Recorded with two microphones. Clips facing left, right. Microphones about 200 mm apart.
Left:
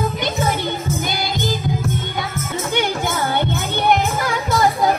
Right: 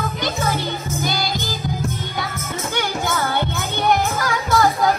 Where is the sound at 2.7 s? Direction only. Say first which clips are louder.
Left 2 dB; 20° left (ahead or behind).